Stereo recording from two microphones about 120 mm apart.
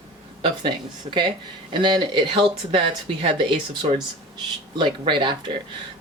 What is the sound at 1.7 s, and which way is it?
Speech, 40° right (ahead or behind).